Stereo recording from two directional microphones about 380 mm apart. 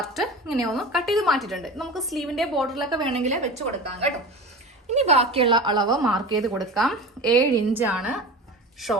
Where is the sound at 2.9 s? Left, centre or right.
Centre.